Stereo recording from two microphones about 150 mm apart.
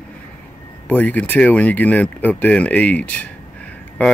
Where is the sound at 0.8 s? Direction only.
10° left (ahead or behind).